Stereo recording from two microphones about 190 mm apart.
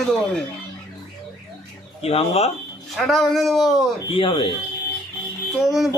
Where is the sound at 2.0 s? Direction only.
30° left (ahead or behind).